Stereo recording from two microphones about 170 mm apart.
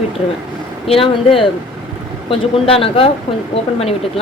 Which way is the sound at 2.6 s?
35° left (ahead or behind).